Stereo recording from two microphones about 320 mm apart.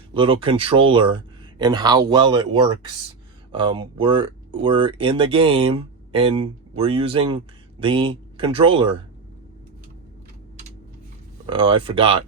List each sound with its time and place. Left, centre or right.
0.1 s speech: centre
11.4 s speech: centre